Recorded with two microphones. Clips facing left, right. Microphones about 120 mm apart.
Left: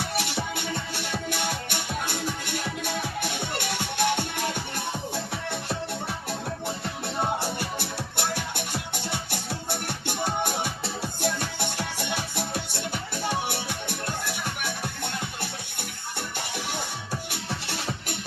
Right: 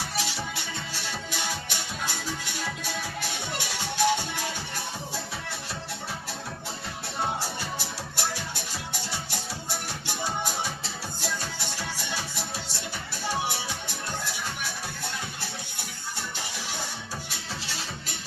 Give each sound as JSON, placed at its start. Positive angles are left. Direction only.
{"t": 0.2, "sound": "music", "side_deg": 55}
{"t": 7.3, "sound": "music", "side_deg": 55}